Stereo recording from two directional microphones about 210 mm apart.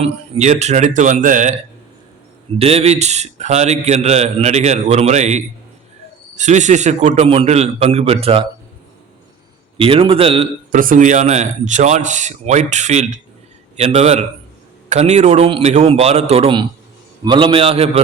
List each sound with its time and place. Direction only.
0.0 s a man's voice: 35° right (ahead or behind)
2.6 s a man's voice: 30° right (ahead or behind)
9.7 s a man's voice: 25° right (ahead or behind)
10.7 s a man's voice: 40° right (ahead or behind)